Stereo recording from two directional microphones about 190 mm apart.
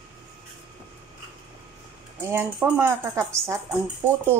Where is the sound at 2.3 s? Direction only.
10° right (ahead or behind).